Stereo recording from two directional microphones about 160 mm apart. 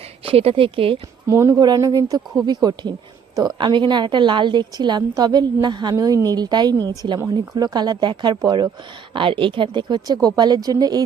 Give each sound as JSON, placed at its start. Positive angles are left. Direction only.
{"t": 0.3, "sound": "speech", "side_deg": -35}
{"t": 1.3, "sound": "a woman's voice", "side_deg": -20}